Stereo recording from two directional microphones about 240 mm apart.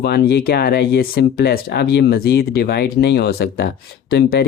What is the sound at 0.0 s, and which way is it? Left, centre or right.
Speech, left.